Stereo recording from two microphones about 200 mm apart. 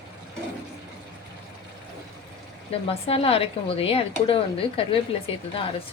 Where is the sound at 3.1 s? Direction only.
30° left (ahead or behind).